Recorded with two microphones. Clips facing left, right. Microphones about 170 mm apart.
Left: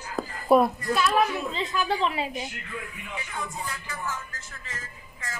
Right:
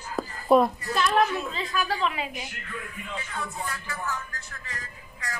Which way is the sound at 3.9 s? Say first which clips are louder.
Right 1 dB; 20° left (ahead or behind).